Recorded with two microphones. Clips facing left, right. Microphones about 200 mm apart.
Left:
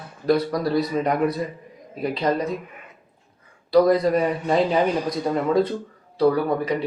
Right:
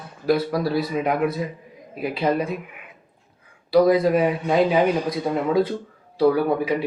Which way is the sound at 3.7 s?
5° right (ahead or behind).